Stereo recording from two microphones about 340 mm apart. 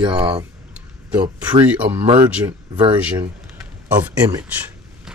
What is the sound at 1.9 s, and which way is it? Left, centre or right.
Speech, centre.